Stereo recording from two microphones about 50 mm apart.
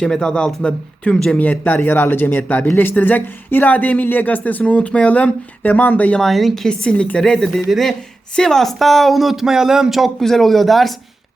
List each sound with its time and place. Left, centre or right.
0.0 s a woman's voice: centre
1.4 s speech: left
4.6 s speech: left
6.1 s speech: centre
6.7 s a woman's voice: centre
10.2 s speech: centre